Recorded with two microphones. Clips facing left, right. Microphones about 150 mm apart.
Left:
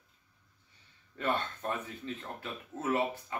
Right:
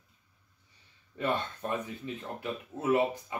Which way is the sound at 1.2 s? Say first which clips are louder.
Right 2 dB; 15° right (ahead or behind).